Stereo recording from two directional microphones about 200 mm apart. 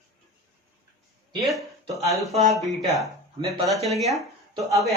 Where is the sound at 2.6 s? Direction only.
Centre (ahead or behind).